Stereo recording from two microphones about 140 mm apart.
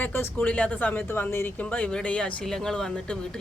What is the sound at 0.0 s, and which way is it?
Speech, 15° left (ahead or behind).